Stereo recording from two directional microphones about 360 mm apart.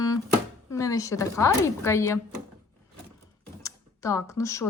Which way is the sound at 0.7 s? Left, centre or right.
Centre.